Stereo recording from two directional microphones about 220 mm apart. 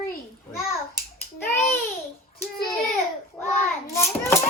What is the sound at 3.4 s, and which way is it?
Speech, 10° left (ahead or behind).